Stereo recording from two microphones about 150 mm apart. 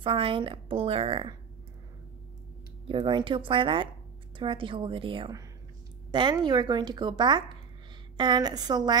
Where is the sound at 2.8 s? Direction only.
35° right (ahead or behind).